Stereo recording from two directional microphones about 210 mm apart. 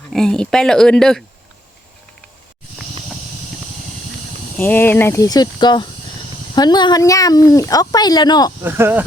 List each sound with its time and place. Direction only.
0.1 s speech: 5° left (ahead or behind)
4.5 s speech: 10° left (ahead or behind)
8.6 s speech: 10° right (ahead or behind)